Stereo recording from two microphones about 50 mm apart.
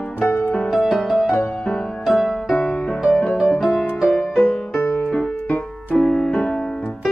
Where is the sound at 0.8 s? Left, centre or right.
Centre.